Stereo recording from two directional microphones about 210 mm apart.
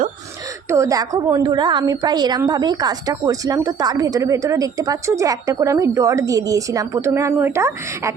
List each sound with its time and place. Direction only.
0.7 s a woman's voice: 15° right (ahead or behind)